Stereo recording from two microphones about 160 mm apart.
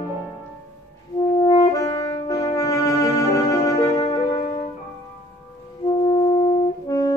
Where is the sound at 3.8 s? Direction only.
20° left (ahead or behind).